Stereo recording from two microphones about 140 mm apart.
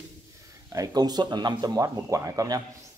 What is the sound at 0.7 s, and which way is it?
A man's voice, 30° right (ahead or behind).